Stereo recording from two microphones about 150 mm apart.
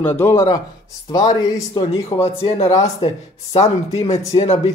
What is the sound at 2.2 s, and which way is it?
A man's voice, 40° left (ahead or behind).